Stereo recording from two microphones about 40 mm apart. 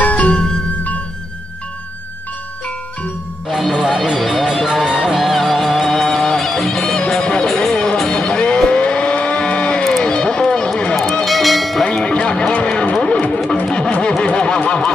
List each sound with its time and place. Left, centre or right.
0.0 s music: left
3.4 s music: centre
4.8 s music: centre
5.1 s music: centre
8.1 s vehicle: left
10.0 s a sound: left
11.2 s music: centre
11.8 s music: left
13.7 s guitar: centre
14.2 s a sound: left